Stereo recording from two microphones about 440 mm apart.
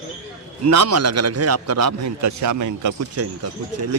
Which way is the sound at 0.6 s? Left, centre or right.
Right.